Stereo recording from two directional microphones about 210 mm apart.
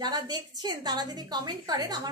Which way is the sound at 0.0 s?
20° right (ahead or behind).